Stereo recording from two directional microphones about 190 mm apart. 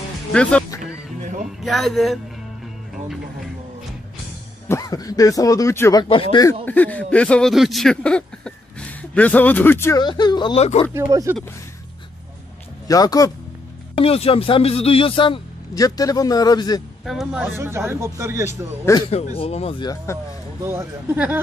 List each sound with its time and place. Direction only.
0.3 s speech: 5° left (ahead or behind)
4.6 s speech: 15° left (ahead or behind)
6.0 s speech: 30° left (ahead or behind)
6.6 s speech: 10° left (ahead or behind); by 10.9 s 30° left (ahead or behind)
10.9 s a man's voice: 15° right (ahead or behind)
12.8 s speech: 20° left (ahead or behind)
13.9 s speech: 30° left (ahead or behind)
17.0 s a man's voice: centre (ahead or behind)
19.0 s speech: 30° left (ahead or behind)
20.6 s a man's voice: 15° right (ahead or behind)